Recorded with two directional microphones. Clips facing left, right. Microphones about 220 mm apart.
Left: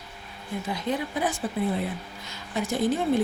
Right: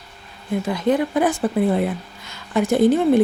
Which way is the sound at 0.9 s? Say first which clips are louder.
Right 10 dB; 50° right (ahead or behind).